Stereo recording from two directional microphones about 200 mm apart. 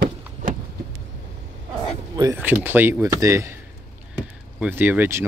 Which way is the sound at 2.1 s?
15° right (ahead or behind).